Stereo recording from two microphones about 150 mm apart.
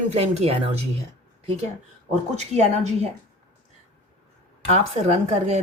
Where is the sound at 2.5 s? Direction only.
45° right (ahead or behind).